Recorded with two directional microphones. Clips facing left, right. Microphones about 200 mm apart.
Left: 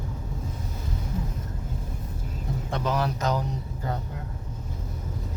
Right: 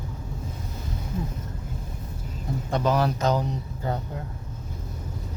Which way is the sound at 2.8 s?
35° right (ahead or behind).